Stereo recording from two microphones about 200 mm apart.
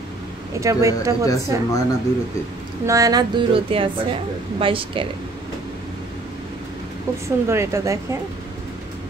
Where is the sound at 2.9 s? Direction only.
15° right (ahead or behind).